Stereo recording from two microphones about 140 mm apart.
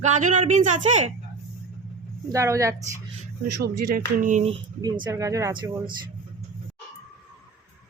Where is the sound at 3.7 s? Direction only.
90° right; by 4.4 s 65° right (ahead or behind).